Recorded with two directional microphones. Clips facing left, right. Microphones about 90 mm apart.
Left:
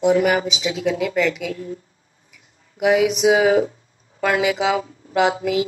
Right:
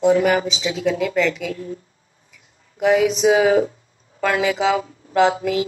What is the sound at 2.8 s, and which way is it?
Speech, 10° left (ahead or behind).